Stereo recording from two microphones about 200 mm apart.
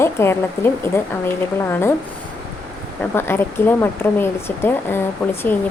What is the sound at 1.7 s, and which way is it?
Speech, 10° left (ahead or behind).